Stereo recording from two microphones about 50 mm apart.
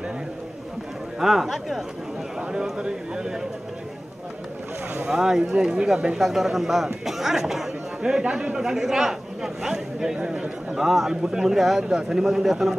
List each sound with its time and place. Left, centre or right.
1.2 s speech: centre
2.8 s a man's voice: centre
5.0 s speech: centre
6.1 s speech: centre
7.1 s a sound: centre
8.6 s a man's voice: centre